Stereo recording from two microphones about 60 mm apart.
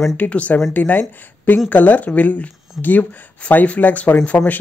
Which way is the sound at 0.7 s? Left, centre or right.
Left.